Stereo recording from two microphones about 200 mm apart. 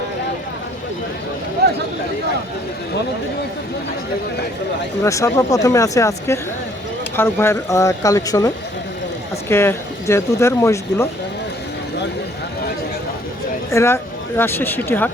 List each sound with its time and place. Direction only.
1.6 s a sound: 50° right (ahead or behind)
5.0 s speech: 15° left (ahead or behind)
13.7 s speech: 15° left (ahead or behind)